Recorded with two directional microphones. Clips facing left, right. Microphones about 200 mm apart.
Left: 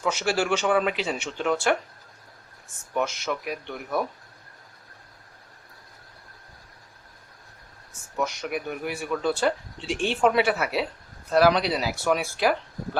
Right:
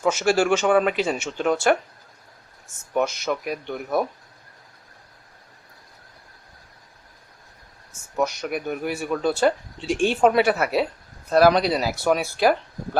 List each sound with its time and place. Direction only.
0.0 s speech: 45° right (ahead or behind)
2.9 s speech: 40° right (ahead or behind)
8.1 s speech: 40° right (ahead or behind)